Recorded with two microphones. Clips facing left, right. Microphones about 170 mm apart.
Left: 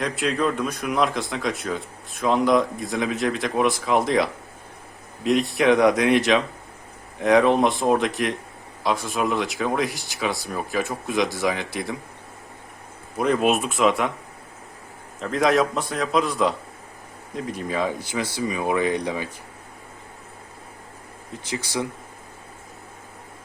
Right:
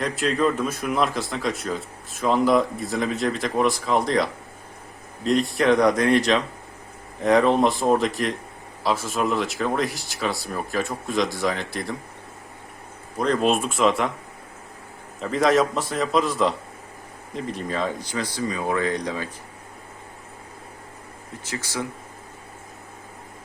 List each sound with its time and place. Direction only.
0.0 s speech: centre (ahead or behind)
13.1 s speech: 10° left (ahead or behind)
15.2 s speech: centre (ahead or behind)
21.5 s speech: 15° left (ahead or behind)